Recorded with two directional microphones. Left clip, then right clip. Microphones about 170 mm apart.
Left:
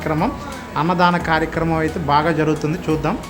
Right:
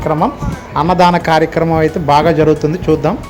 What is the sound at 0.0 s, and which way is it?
Speech, 15° right (ahead or behind).